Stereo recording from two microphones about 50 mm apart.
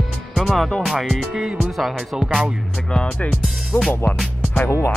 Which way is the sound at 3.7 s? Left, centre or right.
Left.